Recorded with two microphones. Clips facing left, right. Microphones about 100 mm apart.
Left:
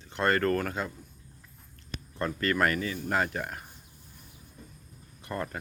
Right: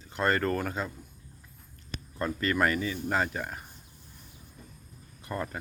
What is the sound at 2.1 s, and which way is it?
Speech, 5° right (ahead or behind).